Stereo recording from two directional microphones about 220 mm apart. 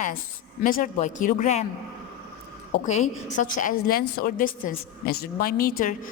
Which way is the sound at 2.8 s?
35° left (ahead or behind).